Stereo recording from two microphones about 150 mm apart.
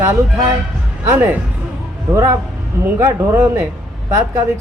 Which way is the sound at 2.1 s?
20° right (ahead or behind).